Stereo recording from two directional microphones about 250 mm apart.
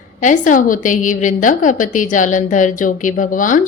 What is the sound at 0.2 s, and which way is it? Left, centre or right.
A woman's voice, left.